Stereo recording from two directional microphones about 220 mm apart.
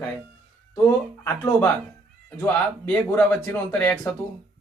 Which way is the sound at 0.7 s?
10° left (ahead or behind).